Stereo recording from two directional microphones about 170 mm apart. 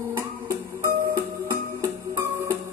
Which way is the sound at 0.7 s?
15° right (ahead or behind).